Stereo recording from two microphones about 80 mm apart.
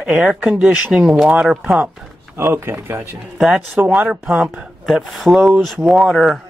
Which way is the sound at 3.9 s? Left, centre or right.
Centre.